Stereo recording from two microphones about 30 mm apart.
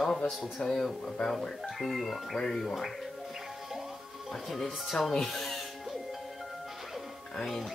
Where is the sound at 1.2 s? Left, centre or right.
Centre.